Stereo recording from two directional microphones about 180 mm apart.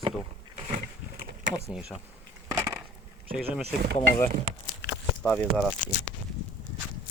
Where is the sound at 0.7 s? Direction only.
45° right (ahead or behind).